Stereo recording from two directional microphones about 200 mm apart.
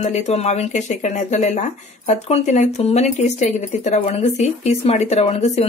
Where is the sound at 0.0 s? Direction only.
35° left (ahead or behind).